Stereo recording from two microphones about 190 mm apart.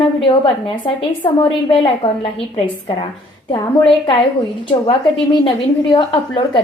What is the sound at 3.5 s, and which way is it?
A woman's voice, 25° left (ahead or behind).